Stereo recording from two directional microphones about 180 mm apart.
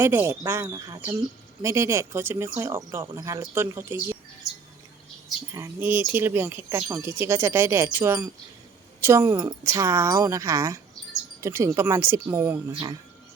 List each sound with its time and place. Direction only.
0.0 s speech: 15° right (ahead or behind)
5.5 s speech: 10° right (ahead or behind)
12.7 s speech: 25° right (ahead or behind)